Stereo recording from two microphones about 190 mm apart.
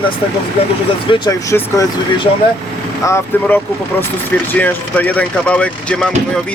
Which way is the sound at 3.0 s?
15° left (ahead or behind).